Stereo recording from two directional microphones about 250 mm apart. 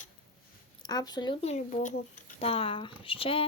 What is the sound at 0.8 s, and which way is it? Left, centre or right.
Speech, centre.